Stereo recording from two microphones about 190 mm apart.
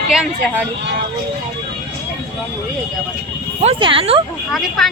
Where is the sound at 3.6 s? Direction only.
30° right (ahead or behind).